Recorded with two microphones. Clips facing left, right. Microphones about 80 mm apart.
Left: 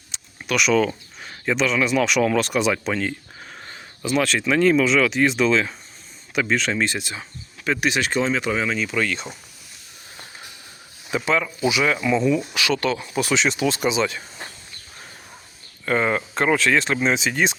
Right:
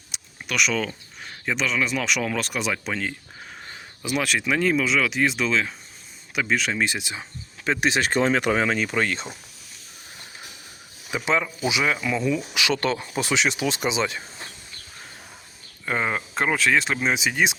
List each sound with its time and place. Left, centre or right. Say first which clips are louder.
0.4 s speech: left 6 dB; centre
4.0 s speech: left 4 dB; centre; by 9.2 s right
11.1 s speech: left 2 dB; centre
11.9 s speech: left 4 dB; centre
12.5 s speech: left 2 dB; right
13.4 s speech: left 3 dB; centre
15.9 s speech: left 4 dB; centre